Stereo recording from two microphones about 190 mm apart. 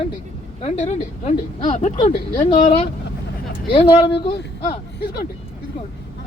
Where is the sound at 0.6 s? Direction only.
40° left (ahead or behind).